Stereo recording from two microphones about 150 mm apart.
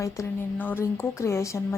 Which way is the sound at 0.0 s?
15° left (ahead or behind).